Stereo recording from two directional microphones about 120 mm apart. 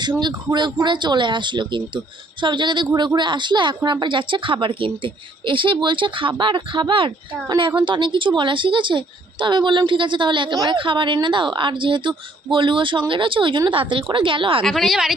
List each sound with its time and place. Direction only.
0.2 s a woman's voice: 40° right (ahead or behind)
14.6 s a woman's voice: centre (ahead or behind)